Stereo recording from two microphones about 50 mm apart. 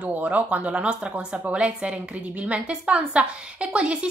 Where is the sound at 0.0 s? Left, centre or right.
Right.